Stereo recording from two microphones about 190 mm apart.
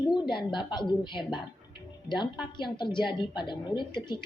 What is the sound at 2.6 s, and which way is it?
A woman's voice, 25° left (ahead or behind).